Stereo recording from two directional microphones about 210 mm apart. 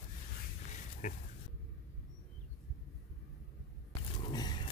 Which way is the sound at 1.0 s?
40° left (ahead or behind).